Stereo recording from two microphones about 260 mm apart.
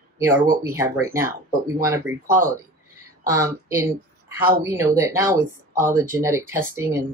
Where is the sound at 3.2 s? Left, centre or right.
Centre.